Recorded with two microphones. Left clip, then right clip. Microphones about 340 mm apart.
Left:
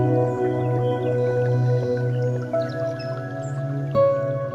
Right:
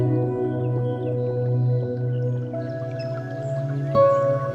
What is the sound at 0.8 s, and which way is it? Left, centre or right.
Music, left.